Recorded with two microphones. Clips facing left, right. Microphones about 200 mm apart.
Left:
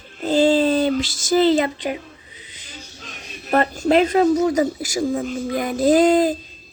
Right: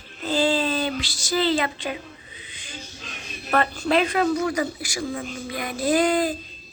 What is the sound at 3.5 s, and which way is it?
Speech, 40° left (ahead or behind).